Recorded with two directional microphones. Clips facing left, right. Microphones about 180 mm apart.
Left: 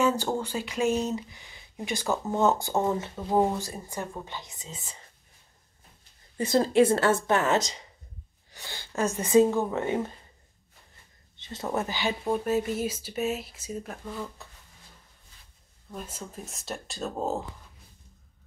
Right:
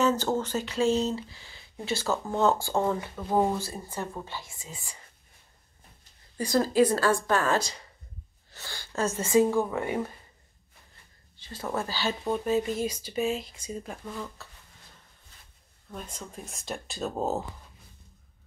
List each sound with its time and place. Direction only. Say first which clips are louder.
0.0 s speech: even; 10° left (ahead or behind)
6.3 s speech: left 2 dB; 25° left (ahead or behind)
11.3 s speech: left 2 dB; 25° left (ahead or behind); by 14.3 s 5° left (ahead or behind)
15.9 s speech: left 1 dB; 5° left (ahead or behind)